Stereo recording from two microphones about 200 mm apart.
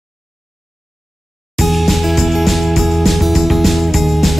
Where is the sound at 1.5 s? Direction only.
Centre (ahead or behind).